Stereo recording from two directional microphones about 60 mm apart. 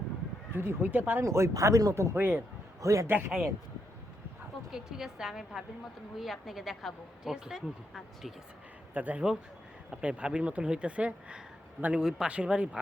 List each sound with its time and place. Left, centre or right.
0.5 s speech: right
1.2 s speech: right
2.1 s speech: right
2.8 s speech: right
3.1 s speech: right
4.7 s a woman's voice: centre
8.9 s a man's voice: right